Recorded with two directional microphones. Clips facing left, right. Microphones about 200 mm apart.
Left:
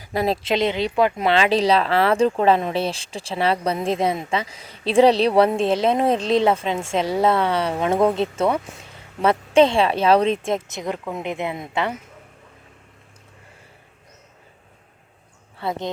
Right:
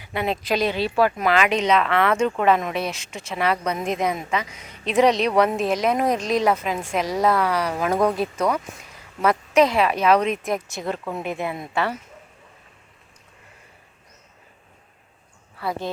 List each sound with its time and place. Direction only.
0.0 s speech: 35° left (ahead or behind)
0.4 s speech: 20° left (ahead or behind)
15.5 s speech: 25° left (ahead or behind)